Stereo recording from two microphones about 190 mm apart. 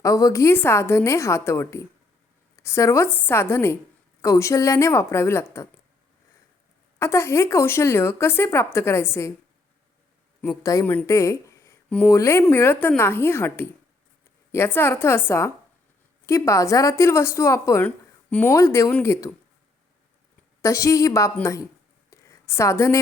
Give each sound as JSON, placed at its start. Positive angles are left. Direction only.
{"t": 0.0, "sound": "speech", "side_deg": 15}
{"t": 7.0, "sound": "speech", "side_deg": 15}
{"t": 10.6, "sound": "speech", "side_deg": 15}
{"t": 20.6, "sound": "speech", "side_deg": 15}
{"t": 22.1, "sound": "a sound", "side_deg": 15}